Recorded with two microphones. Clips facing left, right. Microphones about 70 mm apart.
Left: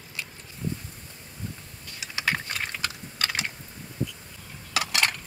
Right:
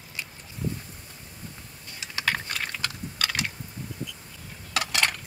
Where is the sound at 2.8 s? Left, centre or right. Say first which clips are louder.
Even; left.